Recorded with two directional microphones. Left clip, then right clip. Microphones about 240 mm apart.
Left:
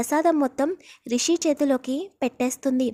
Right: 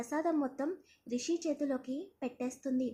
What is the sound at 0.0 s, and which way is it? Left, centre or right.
A woman's voice, left.